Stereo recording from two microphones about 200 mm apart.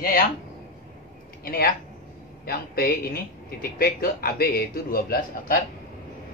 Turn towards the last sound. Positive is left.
turn(degrees=50)  # may be behind; listen again after turning